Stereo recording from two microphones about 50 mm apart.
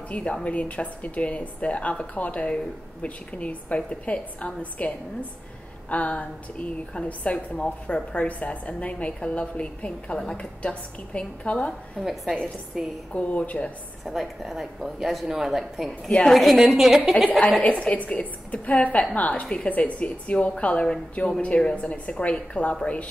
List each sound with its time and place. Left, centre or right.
0.1 s a woman's voice: left
12.7 s a woman's voice: centre
13.1 s a woman's voice: left
14.0 s a woman's voice: centre
17.6 s a woman's voice: left